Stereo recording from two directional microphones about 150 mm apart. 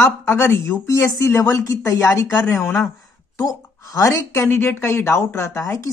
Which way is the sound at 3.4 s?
20° left (ahead or behind).